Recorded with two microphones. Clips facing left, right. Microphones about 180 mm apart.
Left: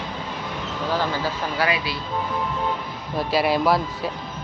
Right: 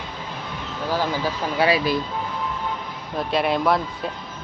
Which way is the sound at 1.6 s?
35° right (ahead or behind).